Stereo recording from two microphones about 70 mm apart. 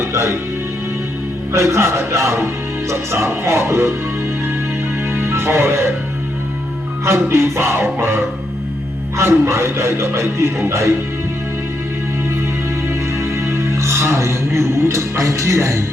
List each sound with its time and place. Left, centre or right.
0.0 s speech: right
1.5 s speech: right
5.1 s music: right
7.0 s speech: right
12.9 s music: right